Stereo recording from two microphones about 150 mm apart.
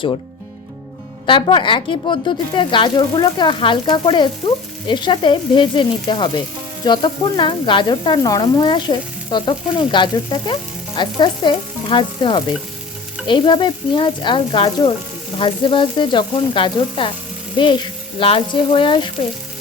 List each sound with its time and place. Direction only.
1.3 s speech: 35° left (ahead or behind)